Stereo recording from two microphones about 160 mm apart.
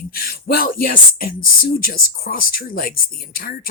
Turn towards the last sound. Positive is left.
turn(degrees=70)  # may be behind; listen again after turning